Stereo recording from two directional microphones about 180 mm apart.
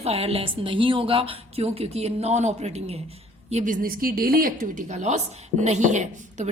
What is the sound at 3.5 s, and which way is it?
A woman's voice, 45° right (ahead or behind).